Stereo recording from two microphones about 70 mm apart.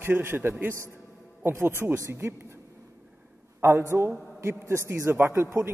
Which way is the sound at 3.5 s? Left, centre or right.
Right.